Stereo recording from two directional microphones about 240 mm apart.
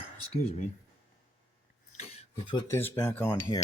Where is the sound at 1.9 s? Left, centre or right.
Left.